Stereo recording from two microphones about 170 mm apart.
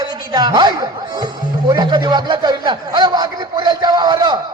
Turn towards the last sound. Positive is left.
turn(degrees=-25)  # may be behind; listen again after turning